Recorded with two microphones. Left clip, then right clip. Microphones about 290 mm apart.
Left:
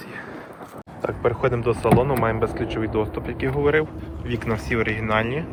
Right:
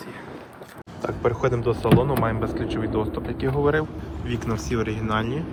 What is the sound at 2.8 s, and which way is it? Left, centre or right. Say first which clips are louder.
Speech: left 3 dB; right.